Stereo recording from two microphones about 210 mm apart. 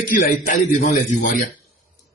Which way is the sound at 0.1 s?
40° left (ahead or behind).